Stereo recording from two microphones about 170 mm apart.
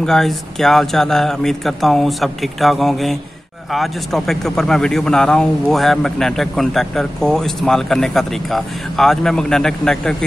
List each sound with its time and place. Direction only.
0.0 s speech: centre (ahead or behind)